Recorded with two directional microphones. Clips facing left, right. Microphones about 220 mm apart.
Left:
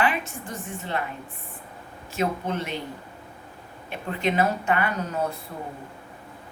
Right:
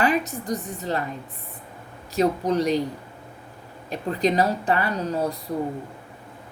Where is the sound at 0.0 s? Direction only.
40° right (ahead or behind).